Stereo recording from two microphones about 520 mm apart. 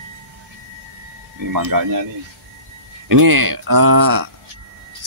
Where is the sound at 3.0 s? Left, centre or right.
Right.